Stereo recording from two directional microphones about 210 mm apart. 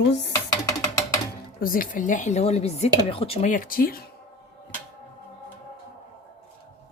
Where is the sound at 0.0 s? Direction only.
55° left (ahead or behind).